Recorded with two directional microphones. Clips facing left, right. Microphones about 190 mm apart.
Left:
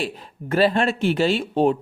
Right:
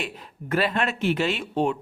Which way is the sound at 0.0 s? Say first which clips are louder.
Left 5 dB; 30° left (ahead or behind).